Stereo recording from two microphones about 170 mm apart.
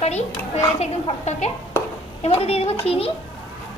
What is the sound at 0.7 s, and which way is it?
A child's voice, 40° left (ahead or behind).